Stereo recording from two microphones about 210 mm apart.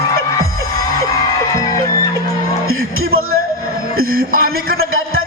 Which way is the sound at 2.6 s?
80° right.